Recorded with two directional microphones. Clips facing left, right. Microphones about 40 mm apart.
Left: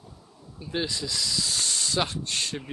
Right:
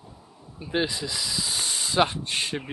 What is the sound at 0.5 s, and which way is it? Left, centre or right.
Speech, centre.